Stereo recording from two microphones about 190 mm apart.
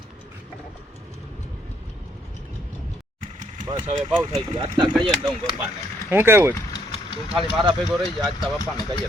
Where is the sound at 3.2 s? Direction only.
40° right (ahead or behind).